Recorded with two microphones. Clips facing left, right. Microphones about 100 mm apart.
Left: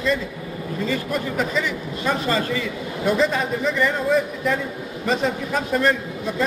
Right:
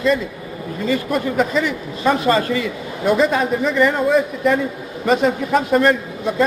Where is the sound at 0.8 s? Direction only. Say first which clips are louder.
Right 6 dB; 55° right (ahead or behind).